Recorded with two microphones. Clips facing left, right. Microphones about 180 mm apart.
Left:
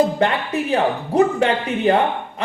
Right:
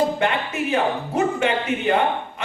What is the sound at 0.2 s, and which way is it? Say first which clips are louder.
A woman's voice: left 3 dB; 35° left (ahead or behind).